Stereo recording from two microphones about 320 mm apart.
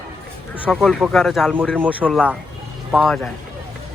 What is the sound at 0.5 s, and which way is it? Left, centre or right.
Speech, centre.